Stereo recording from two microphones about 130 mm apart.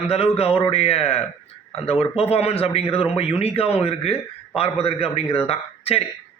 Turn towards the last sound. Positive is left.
turn(degrees=50)  # may be behind; listen again after turning